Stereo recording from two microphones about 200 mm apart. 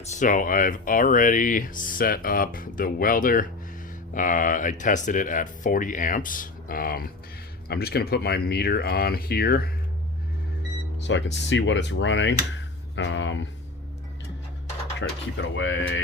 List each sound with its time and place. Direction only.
0.0 s speech: 35° left (ahead or behind)
11.0 s speech: 65° left (ahead or behind)
14.9 s speech: 65° left (ahead or behind)